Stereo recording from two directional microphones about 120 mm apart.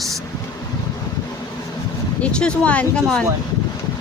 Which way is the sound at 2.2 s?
10° left (ahead or behind).